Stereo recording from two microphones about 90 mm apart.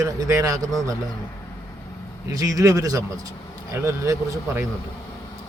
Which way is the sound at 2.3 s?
40° right (ahead or behind).